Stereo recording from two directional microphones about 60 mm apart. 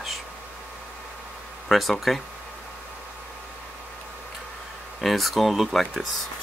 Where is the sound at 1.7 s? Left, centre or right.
Centre.